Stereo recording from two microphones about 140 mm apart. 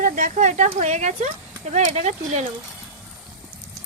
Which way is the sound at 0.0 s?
65° right (ahead or behind).